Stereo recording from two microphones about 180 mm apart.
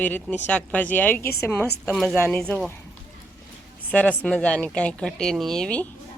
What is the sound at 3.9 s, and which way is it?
Speech, 10° left (ahead or behind).